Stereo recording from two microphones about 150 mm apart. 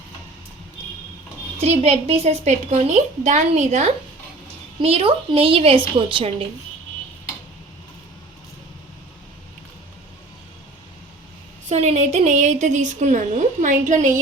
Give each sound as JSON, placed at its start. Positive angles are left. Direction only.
{"t": 1.6, "sound": "a woman's voice", "side_deg": -45}
{"t": 11.7, "sound": "a woman's voice", "side_deg": -45}